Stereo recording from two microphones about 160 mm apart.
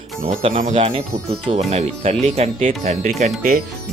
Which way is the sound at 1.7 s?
40° right (ahead or behind).